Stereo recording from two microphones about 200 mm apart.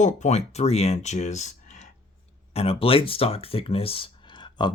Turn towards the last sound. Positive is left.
turn(degrees=20)  # may be behind; listen again after turning